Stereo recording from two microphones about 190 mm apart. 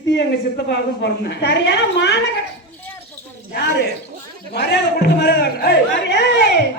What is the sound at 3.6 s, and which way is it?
Speech, 65° left (ahead or behind).